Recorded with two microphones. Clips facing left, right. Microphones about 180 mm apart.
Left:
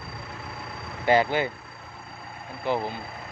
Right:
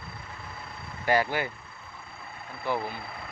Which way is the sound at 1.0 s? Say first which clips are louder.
Left 4 dB; 20° left (ahead or behind).